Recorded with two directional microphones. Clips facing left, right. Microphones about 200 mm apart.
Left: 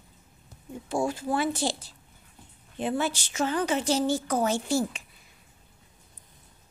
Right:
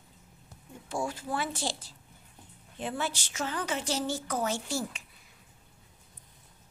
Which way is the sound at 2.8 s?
25° left (ahead or behind).